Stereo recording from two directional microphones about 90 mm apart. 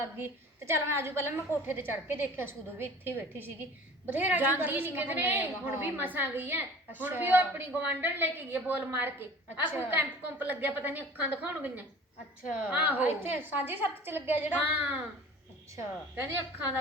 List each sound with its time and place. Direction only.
0.2 s a woman's voice: 30° right (ahead or behind)